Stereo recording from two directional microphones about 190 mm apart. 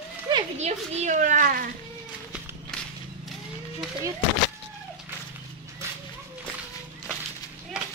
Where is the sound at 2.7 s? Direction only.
5° left (ahead or behind).